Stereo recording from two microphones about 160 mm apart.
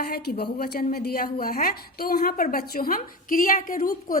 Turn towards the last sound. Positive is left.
turn(degrees=60)  # may be behind; listen again after turning